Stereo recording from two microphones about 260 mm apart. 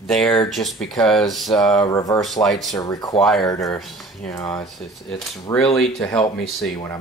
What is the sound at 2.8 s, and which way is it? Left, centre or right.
Speech, centre.